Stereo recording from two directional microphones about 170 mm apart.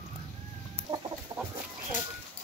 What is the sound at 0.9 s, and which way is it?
Chicken, 35° right (ahead or behind).